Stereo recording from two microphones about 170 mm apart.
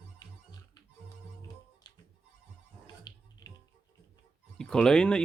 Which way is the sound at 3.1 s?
25° left (ahead or behind).